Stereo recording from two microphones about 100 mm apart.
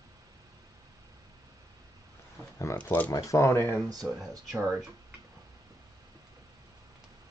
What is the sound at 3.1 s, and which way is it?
Speech, 35° left (ahead or behind).